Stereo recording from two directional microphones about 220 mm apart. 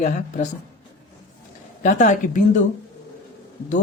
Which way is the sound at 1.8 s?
35° left (ahead or behind).